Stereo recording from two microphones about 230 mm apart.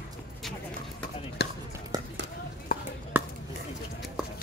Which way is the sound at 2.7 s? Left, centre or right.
Left.